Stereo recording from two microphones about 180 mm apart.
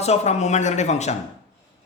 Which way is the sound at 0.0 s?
40° left (ahead or behind).